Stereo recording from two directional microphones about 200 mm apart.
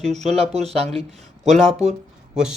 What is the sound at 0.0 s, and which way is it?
Speech, 35° right (ahead or behind).